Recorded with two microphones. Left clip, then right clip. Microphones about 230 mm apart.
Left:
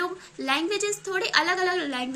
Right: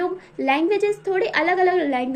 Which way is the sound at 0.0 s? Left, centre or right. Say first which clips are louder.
Right 6 dB; centre.